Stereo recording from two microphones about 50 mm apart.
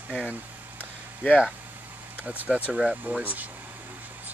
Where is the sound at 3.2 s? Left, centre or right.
Right.